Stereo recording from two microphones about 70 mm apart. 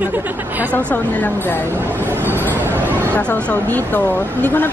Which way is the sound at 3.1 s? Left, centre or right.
Left.